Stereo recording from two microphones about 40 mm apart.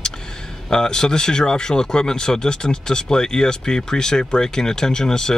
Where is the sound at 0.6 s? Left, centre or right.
Centre.